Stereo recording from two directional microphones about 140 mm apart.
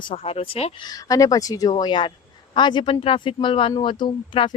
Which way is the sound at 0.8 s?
25° left (ahead or behind).